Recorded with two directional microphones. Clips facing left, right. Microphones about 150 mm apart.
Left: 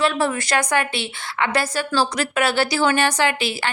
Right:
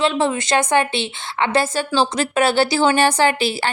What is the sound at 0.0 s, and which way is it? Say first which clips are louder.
A woman's voice: right 2 dB; 20° right (ahead or behind).